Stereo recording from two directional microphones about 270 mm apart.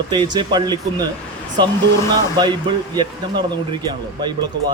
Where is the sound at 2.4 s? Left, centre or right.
Centre.